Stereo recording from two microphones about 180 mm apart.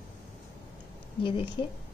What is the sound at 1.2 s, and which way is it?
Speech, 30° left (ahead or behind).